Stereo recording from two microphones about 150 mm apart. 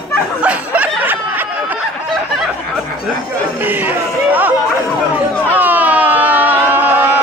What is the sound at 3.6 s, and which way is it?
Chatter, 10° right (ahead or behind).